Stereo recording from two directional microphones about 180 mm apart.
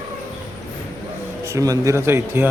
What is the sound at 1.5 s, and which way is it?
Speech, 20° right (ahead or behind).